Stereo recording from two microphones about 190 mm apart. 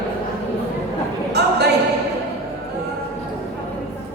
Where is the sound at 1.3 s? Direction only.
60° right (ahead or behind).